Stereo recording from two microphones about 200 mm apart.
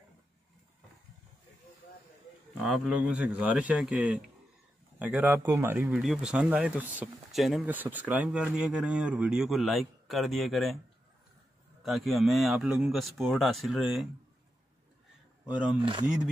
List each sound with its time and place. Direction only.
2.6 s speech: centre (ahead or behind)
11.8 s speech: centre (ahead or behind)
15.4 s speech: 5° right (ahead or behind)
15.8 s speech: 25° right (ahead or behind)